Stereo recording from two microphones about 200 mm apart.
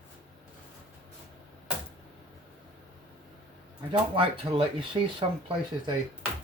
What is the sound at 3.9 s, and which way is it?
Speech, 25° right (ahead or behind).